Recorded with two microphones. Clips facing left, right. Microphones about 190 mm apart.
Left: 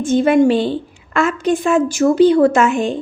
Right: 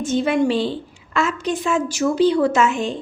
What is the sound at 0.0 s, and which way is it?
A woman's voice, 50° left (ahead or behind).